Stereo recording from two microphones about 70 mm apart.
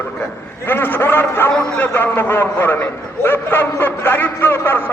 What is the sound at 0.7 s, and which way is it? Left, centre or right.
A man's voice, left.